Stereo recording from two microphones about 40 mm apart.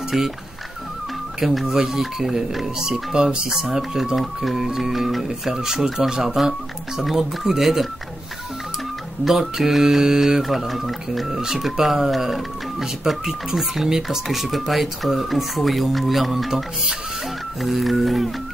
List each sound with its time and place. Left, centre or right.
1.4 s speech: centre; by 3.7 s right
3.7 s speech: centre
5.5 s speech: centre
9.2 s speech: centre